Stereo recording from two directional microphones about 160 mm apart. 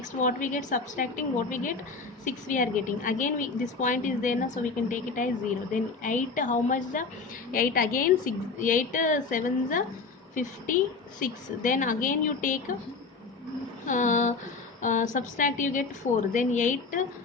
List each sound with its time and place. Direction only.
0.2 s a woman's voice: 50° left (ahead or behind)
7.5 s a woman's voice: 60° left (ahead or behind)
13.8 s a woman's voice: 50° left (ahead or behind)